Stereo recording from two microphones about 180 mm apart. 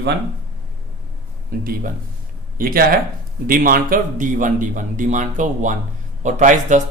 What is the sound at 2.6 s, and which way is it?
Speech, 55° right (ahead or behind).